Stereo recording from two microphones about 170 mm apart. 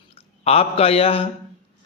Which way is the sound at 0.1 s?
35° left (ahead or behind).